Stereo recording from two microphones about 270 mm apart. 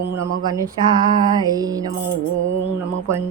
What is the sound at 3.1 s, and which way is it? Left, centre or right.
Mantra, centre.